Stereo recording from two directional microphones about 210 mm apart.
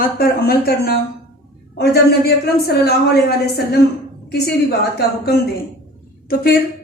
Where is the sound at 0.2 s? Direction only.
45° left (ahead or behind).